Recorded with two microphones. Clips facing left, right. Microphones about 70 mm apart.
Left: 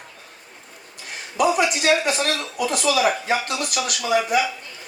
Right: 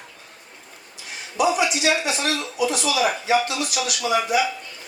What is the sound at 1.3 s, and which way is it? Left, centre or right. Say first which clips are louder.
Speech: left 1 dB; left.